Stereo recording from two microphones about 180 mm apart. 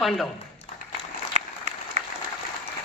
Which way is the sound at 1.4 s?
35° right (ahead or behind).